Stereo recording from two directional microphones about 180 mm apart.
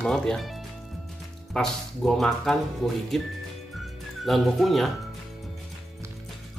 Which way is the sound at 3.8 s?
Centre (ahead or behind).